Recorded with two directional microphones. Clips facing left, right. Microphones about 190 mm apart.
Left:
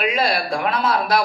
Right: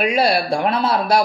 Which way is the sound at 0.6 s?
30° right (ahead or behind).